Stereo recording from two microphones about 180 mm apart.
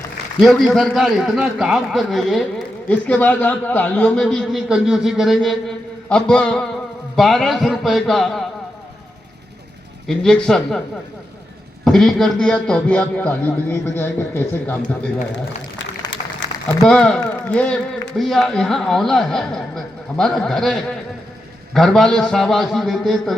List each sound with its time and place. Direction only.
0.4 s a man's voice: centre (ahead or behind)
10.1 s a man's voice: 5° left (ahead or behind)
11.9 s a man's voice: 5° left (ahead or behind)
16.1 s a sound: 90° left
16.6 s a man's voice: 5° left (ahead or behind)